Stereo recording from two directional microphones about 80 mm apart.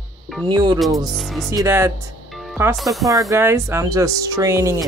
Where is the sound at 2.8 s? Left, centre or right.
Centre.